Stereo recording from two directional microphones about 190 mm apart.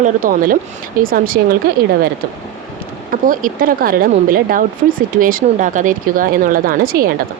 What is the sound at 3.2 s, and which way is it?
Speech, 45° right (ahead or behind).